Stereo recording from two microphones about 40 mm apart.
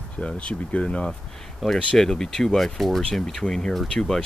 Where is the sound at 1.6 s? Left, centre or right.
Centre.